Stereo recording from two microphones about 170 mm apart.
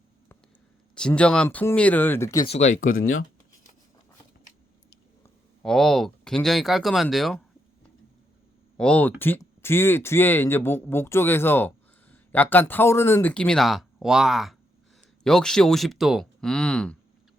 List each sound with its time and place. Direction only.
0.9 s speech: 5° left (ahead or behind)
2.5 s speech: 45° left (ahead or behind)
5.6 s speech: centre (ahead or behind)
8.8 s speech: 10° left (ahead or behind)